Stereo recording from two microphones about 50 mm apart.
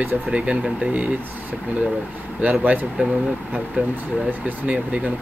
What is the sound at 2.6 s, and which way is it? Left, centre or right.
Speech, right.